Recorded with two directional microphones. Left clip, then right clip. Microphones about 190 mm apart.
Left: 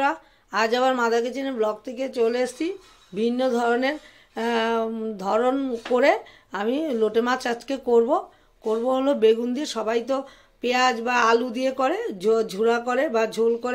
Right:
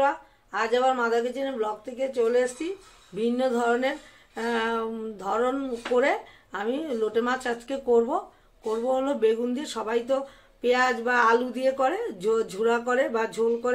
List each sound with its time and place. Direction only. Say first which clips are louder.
0.5 s speech: left 2 dB; 45° left (ahead or behind)